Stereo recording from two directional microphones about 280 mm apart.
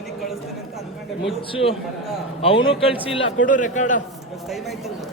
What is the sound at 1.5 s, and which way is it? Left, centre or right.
A man's voice, centre.